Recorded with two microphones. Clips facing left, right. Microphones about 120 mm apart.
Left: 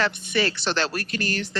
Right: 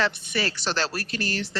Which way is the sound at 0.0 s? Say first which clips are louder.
Left 2 dB; 40° right (ahead or behind).